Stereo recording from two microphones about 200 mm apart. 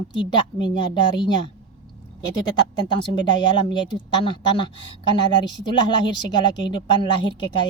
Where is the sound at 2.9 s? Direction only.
25° left (ahead or behind).